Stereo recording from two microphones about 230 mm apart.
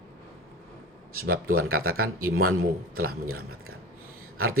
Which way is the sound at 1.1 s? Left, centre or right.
Right.